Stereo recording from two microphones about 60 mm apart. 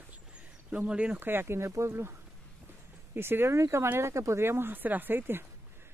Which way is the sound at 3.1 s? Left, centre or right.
Right.